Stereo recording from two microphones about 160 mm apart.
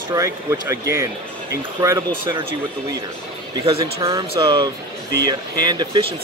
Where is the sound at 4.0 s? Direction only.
20° right (ahead or behind).